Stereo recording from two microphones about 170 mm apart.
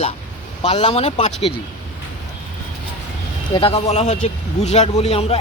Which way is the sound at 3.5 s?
35° left (ahead or behind).